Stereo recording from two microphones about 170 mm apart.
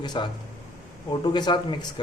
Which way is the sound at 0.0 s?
25° left (ahead or behind).